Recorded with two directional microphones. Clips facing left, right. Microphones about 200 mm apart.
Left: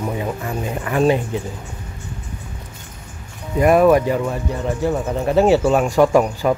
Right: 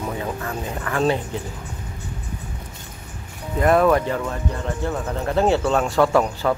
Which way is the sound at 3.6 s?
15° left (ahead or behind).